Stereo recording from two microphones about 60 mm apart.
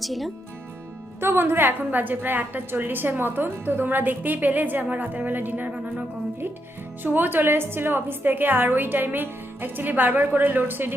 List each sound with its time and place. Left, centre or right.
0.0 s speech: centre
1.2 s a woman's voice: right
7.0 s a woman's voice: right